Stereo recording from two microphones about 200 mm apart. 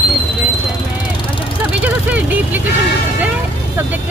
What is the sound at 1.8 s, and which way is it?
Speech, 5° right (ahead or behind).